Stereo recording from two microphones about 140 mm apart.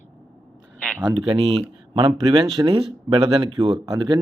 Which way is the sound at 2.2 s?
25° right (ahead or behind).